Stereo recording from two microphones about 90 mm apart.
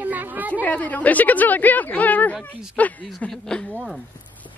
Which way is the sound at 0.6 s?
15° left (ahead or behind).